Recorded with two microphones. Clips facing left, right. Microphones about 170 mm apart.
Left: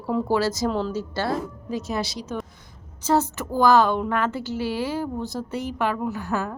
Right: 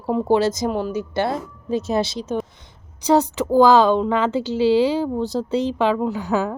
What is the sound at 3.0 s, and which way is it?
A woman's voice, 15° right (ahead or behind).